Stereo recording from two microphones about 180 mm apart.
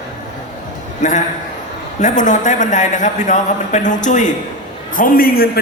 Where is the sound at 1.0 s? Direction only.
40° left (ahead or behind).